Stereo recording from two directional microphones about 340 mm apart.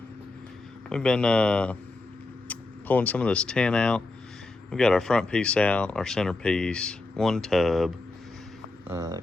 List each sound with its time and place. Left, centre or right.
0.9 s speech: centre